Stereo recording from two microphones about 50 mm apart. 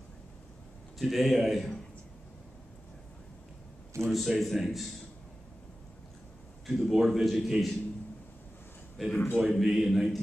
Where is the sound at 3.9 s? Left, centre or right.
Right.